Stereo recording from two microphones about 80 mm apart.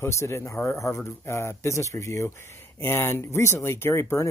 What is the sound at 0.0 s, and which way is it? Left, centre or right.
Speech, left.